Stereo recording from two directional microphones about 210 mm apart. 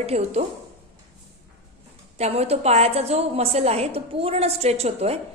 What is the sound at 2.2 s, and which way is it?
A woman's voice, 30° right (ahead or behind).